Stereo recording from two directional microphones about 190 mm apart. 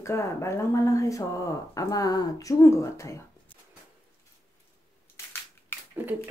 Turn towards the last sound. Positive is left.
turn(degrees=-10)  # may be behind; listen again after turning